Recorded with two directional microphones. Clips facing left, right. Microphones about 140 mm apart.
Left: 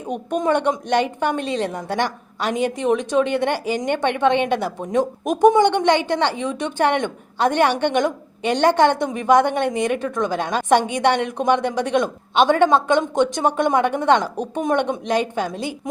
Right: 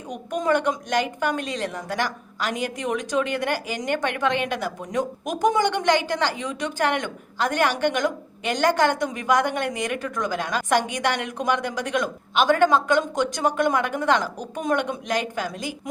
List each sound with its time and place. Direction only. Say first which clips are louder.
0.3 s a woman's voice: left 3 dB; 25° left (ahead or behind)